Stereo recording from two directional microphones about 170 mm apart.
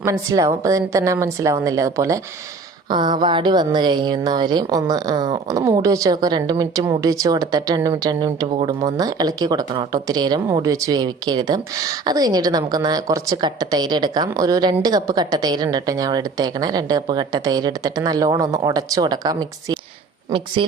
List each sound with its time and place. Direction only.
0.0 s speech: 20° right (ahead or behind)